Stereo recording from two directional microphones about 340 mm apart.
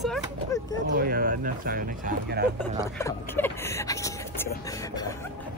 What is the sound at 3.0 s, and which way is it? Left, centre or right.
Speech, centre.